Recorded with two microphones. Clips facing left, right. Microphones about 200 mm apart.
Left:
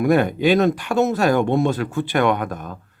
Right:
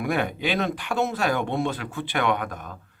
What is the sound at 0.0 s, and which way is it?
Speech, 45° left (ahead or behind).